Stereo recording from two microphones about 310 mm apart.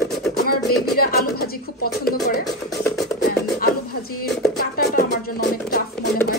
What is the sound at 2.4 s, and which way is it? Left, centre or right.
Music, centre.